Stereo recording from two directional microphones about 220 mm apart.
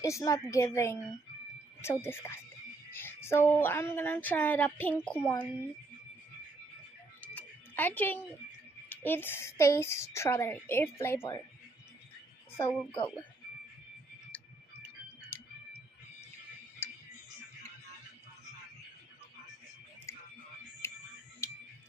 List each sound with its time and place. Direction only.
0.0 s a woman's voice: 15° left (ahead or behind)
7.2 s a sound: 5° left (ahead or behind)
8.9 s a woman's voice: 10° left (ahead or behind)
12.5 s speech: 10° left (ahead or behind)
16.8 s music: 10° left (ahead or behind)
20.8 s music: 10° left (ahead or behind)